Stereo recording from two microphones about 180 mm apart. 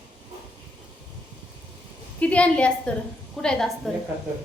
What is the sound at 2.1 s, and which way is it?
A woman's voice, 5° left (ahead or behind).